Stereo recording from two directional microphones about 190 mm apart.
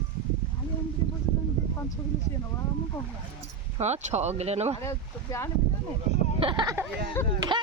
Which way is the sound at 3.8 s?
35° right (ahead or behind).